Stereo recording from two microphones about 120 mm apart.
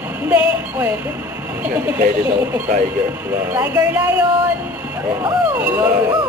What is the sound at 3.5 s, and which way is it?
Speech, 15° right (ahead or behind).